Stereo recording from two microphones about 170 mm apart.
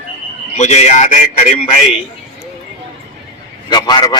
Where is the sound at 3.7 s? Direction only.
25° left (ahead or behind).